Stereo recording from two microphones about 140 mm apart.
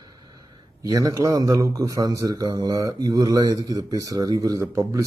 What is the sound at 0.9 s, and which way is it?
A man's voice, 25° right (ahead or behind).